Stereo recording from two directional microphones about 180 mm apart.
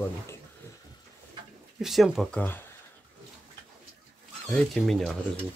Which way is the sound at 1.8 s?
Centre (ahead or behind).